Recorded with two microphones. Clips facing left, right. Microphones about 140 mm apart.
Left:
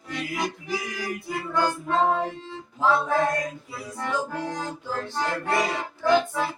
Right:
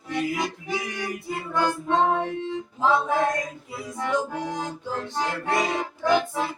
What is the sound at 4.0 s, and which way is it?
Music, 15° right (ahead or behind).